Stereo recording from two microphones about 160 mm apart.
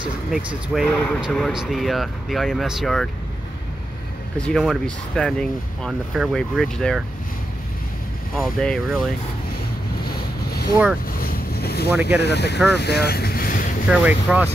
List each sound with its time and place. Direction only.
0.3 s speech: 5° right (ahead or behind)
4.5 s speech: 5° left (ahead or behind)
8.4 s speech: centre (ahead or behind)
10.0 s boat: 75° left (ahead or behind)
12.2 s speech: 90° left
12.7 s vehicle: 90° left; by 13.7 s 60° left (ahead or behind)
13.8 s speech: 5° right (ahead or behind)